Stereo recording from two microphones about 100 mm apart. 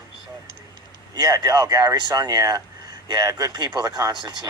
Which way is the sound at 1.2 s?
40° right (ahead or behind).